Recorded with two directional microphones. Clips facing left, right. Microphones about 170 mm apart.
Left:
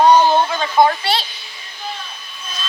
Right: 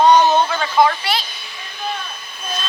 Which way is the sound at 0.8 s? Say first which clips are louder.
Left 2 dB; 30° left (ahead or behind).